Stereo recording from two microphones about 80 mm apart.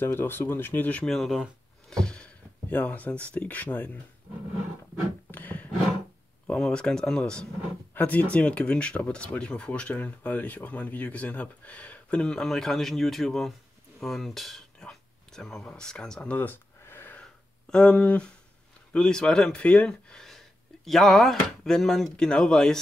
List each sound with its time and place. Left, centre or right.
0.0 s speech: left
1.0 s speech: centre; by 4.0 s left
5.3 s roar: left
6.4 s speech: centre
16.3 s a sound: left
17.2 s a sound: centre
18.9 s speech: centre